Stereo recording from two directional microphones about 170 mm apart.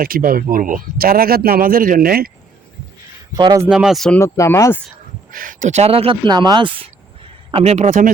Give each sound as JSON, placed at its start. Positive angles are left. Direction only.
{"t": 0.0, "sound": "speech", "side_deg": -55}
{"t": 3.3, "sound": "speech", "side_deg": -25}
{"t": 3.7, "sound": "speech", "side_deg": -5}
{"t": 4.2, "sound": "speech", "side_deg": 15}
{"t": 5.3, "sound": "a man's voice", "side_deg": -55}